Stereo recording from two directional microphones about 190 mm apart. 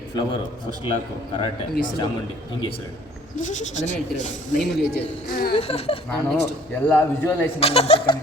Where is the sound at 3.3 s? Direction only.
40° left (ahead or behind).